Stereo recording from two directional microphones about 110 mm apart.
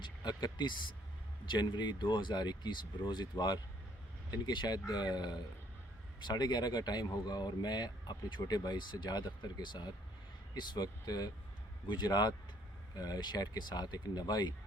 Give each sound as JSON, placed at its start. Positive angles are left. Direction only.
{"t": 0.0, "sound": "speech", "side_deg": 40}